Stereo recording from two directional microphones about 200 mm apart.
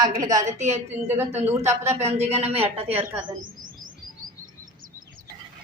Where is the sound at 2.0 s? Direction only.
30° right (ahead or behind).